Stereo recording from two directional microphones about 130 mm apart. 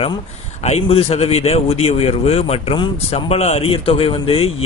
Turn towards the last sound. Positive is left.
turn(degrees=45)  # may be behind; listen again after turning